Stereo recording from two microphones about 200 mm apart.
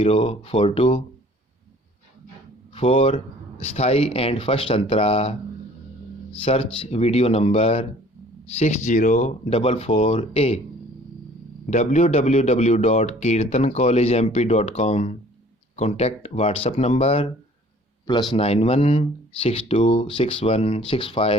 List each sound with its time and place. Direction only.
0.0 s speech: 30° left (ahead or behind)
2.7 s speech: 30° left (ahead or behind)
6.4 s speech: 30° left (ahead or behind)
11.7 s speech: 35° left (ahead or behind)